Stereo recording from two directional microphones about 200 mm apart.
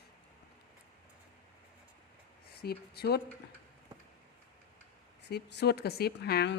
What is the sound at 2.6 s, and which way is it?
Speech, 50° left (ahead or behind).